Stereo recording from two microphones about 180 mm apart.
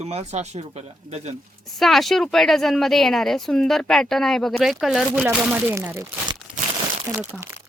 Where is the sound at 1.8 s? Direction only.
Centre (ahead or behind); by 6.3 s 15° right (ahead or behind).